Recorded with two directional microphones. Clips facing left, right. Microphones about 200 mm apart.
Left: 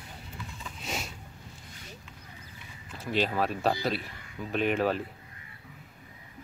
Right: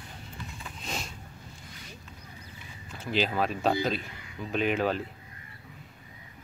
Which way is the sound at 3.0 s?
Centre (ahead or behind).